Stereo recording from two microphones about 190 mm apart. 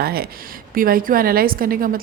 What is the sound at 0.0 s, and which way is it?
A woman's voice, 55° right (ahead or behind).